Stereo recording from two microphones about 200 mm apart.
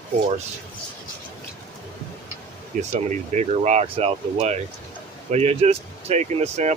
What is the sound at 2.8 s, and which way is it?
Speech, 35° right (ahead or behind).